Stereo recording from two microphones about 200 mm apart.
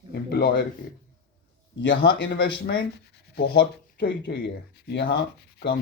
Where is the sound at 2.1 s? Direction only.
65° left (ahead or behind).